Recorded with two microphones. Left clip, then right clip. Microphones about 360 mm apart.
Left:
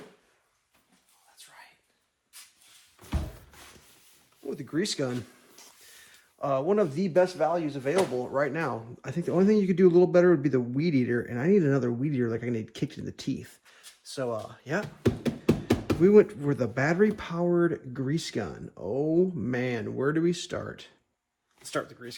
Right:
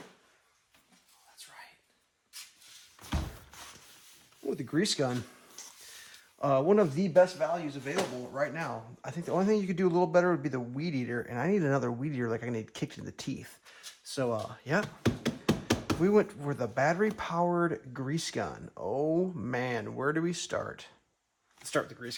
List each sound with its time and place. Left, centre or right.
4.4 s speech: centre
6.0 s speech: right
7.3 s speech: centre; by 19.1 s right
19.1 s speech: centre